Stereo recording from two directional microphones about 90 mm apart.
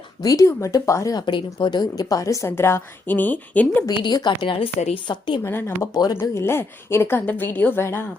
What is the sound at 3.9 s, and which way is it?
A woman's voice, 55° left (ahead or behind).